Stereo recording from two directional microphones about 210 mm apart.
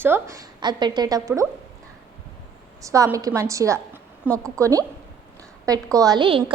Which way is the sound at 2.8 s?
15° right (ahead or behind).